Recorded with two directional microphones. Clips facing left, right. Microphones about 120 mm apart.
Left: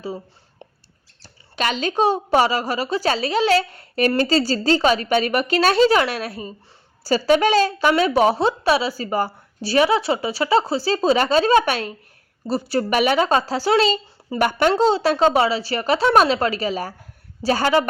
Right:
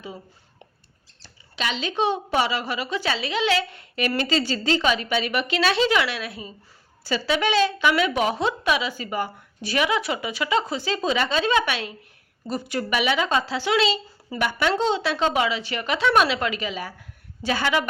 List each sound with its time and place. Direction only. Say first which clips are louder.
1.2 s speech: left 6 dB; 45° left (ahead or behind)